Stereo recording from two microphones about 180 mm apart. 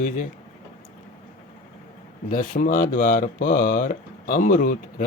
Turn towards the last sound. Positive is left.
turn(degrees=50)  # may be behind; listen again after turning